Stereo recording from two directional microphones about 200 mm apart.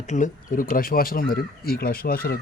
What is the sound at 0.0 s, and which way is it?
Speech, 35° left (ahead or behind).